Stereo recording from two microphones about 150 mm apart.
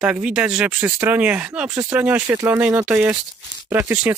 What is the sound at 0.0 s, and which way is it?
Speech, 5° right (ahead or behind).